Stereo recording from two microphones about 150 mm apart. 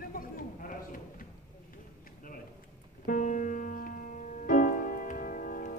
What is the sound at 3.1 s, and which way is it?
Music, 60° left (ahead or behind).